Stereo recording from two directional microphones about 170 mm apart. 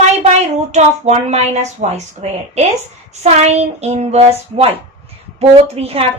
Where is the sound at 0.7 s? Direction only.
40° right (ahead or behind).